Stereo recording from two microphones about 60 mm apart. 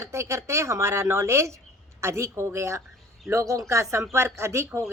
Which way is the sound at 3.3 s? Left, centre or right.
Right.